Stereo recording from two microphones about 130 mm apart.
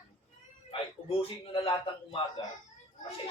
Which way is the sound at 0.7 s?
40° left (ahead or behind).